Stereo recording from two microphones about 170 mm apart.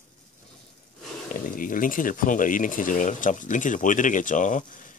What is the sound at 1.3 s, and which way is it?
Speech, 55° left (ahead or behind).